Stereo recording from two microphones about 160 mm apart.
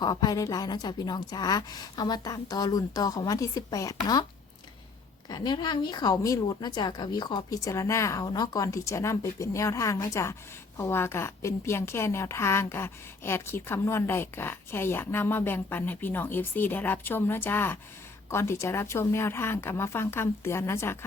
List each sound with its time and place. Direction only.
0.0 s a woman's voice: 25° left (ahead or behind)
5.3 s a woman's voice: 25° left (ahead or behind)